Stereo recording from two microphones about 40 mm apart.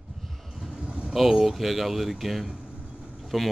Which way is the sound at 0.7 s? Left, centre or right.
Right.